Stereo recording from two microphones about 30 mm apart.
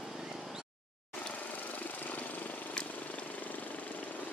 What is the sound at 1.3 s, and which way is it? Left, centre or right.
Vehicle, left.